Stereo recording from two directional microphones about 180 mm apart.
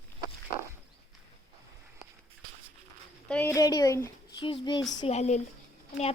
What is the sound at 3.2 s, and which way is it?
Speech, 10° left (ahead or behind).